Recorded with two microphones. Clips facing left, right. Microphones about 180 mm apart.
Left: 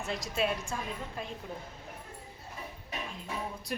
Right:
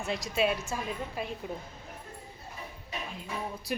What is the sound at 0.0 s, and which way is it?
Speech, centre (ahead or behind).